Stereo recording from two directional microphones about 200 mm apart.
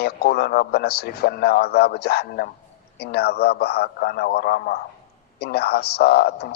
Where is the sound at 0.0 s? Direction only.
50° left (ahead or behind).